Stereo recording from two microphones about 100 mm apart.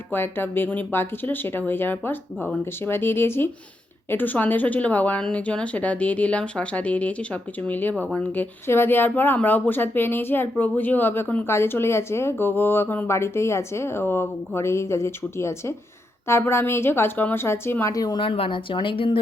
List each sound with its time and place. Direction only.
0.1 s speech: 20° left (ahead or behind)
8.6 s speech: 25° left (ahead or behind)
17.9 s speech: 40° left (ahead or behind)
18.2 s speech: 60° left (ahead or behind)